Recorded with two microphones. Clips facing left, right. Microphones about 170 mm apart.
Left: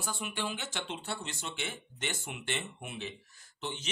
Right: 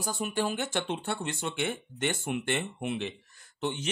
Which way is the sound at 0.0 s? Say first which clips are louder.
Right 7 dB; 40° right (ahead or behind).